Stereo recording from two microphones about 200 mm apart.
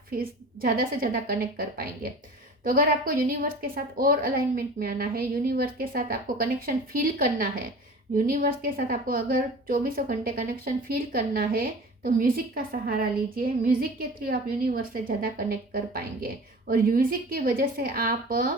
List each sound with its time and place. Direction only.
0.2 s a woman's voice: 45° right (ahead or behind)